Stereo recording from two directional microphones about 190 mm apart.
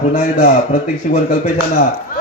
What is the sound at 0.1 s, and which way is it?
A man's voice, 45° left (ahead or behind).